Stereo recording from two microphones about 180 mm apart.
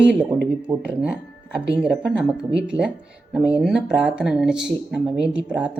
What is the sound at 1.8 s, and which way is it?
Speech, 5° right (ahead or behind).